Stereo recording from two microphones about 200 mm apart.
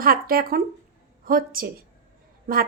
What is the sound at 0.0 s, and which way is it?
A woman's voice, 50° right (ahead or behind).